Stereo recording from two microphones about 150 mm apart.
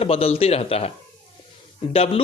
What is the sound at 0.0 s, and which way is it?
A man's voice, 40° left (ahead or behind).